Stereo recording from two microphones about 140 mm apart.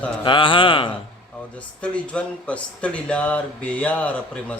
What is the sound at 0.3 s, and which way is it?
Speech, 35° left (ahead or behind).